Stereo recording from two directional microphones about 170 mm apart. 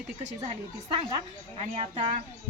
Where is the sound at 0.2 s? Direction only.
40° right (ahead or behind).